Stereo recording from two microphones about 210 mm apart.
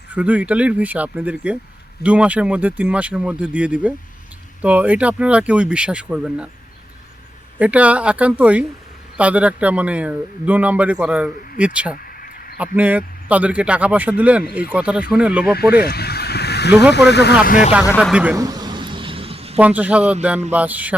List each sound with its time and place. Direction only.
0.1 s speech: 5° right (ahead or behind)
7.6 s speech: 5° right (ahead or behind)
12.0 s a sound: 45° left (ahead or behind)
12.5 s speech: 5° right (ahead or behind)
15.8 s vehicle: 50° left (ahead or behind)
16.9 s speech: 55° left (ahead or behind)
17.4 s speech: 40° left (ahead or behind)
18.0 s speech: 5° right (ahead or behind)
18.4 s vehicle: 20° right (ahead or behind)
19.5 s speech: 5° right (ahead or behind)